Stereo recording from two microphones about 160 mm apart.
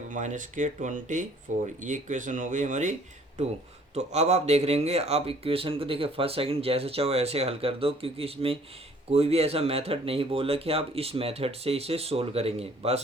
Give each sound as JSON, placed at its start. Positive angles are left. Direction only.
{"t": 0.1, "sound": "speech", "side_deg": -50}